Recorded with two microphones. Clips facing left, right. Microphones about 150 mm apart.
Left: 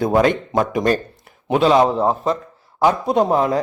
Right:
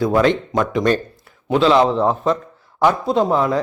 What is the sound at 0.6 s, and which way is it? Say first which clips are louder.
Speech: even; 40° left (ahead or behind).